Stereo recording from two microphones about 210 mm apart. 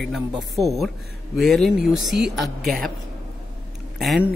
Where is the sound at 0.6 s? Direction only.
20° right (ahead or behind).